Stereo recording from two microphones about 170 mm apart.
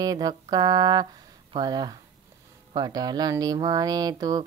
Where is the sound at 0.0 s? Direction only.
25° right (ahead or behind).